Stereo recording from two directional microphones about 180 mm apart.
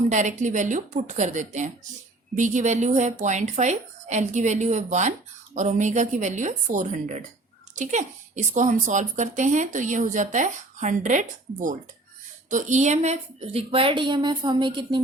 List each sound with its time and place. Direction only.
0.1 s a woman's voice: 40° right (ahead or behind); by 15.0 s 25° right (ahead or behind)